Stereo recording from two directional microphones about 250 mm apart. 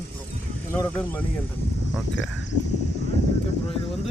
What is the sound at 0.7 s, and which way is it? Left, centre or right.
Speech, centre.